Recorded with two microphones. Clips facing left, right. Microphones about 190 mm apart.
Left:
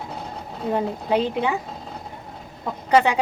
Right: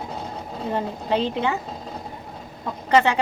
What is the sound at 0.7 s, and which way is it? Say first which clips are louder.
Speech: left 2 dB; 10° left (ahead or behind).